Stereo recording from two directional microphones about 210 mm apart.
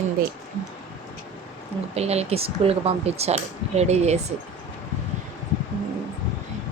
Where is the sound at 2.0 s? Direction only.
30° right (ahead or behind).